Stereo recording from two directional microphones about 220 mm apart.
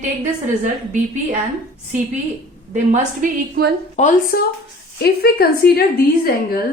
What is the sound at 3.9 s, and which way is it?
Speech, 35° left (ahead or behind).